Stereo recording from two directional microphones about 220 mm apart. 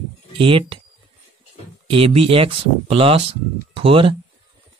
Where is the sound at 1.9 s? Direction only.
25° right (ahead or behind).